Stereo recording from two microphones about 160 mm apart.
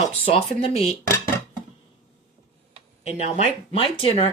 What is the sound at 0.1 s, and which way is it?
Speech, 35° left (ahead or behind).